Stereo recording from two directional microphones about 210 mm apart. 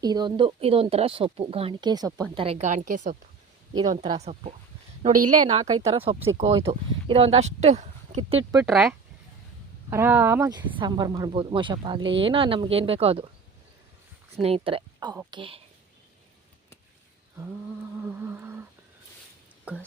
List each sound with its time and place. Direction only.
0.0 s speech: 20° right (ahead or behind); by 3.2 s 40° right (ahead or behind)
3.8 s a woman's voice: 20° right (ahead or behind)
8.6 s speech: centre (ahead or behind); by 13.3 s 25° right (ahead or behind)
14.4 s a woman's voice: 25° right (ahead or behind)
18.0 s humming: 10° right (ahead or behind)